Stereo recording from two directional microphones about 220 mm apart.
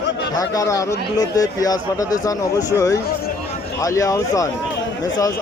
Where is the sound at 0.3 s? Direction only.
15° left (ahead or behind).